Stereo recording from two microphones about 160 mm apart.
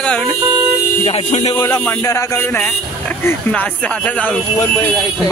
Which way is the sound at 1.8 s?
15° left (ahead or behind).